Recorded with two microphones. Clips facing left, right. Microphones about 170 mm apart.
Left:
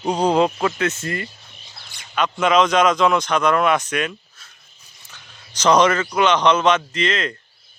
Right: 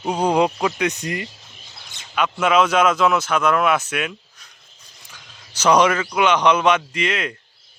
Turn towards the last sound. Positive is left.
turn(degrees=-10)  # may be behind; listen again after turning